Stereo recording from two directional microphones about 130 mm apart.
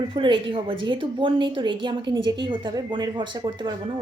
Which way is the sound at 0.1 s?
40° right (ahead or behind).